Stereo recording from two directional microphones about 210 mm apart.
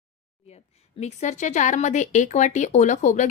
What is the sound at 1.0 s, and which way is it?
Speech, 35° left (ahead or behind).